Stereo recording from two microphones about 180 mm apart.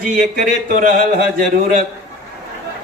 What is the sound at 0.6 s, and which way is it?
A man's voice, 45° right (ahead or behind).